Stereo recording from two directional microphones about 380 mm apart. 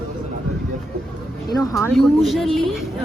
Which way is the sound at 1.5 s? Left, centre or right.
Centre.